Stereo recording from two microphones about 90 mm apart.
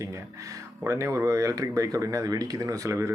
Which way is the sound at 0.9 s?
35° right (ahead or behind).